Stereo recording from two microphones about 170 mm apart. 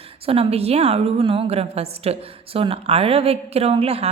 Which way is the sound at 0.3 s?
35° right (ahead or behind).